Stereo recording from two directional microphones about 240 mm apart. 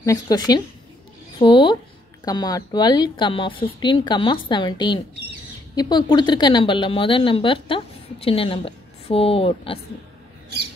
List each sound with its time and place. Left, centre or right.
0.0 s a woman's voice: centre